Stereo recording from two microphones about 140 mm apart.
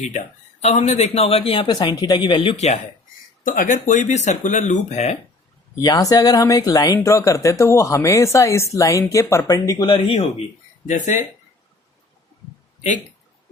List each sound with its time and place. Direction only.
0.6 s a man's voice: 50° left (ahead or behind)
3.4 s speech: 70° left (ahead or behind); by 5.1 s 50° left (ahead or behind)
5.8 s speech: 25° left (ahead or behind)
9.9 s speech: 45° left (ahead or behind)
10.8 s speech: 60° left (ahead or behind)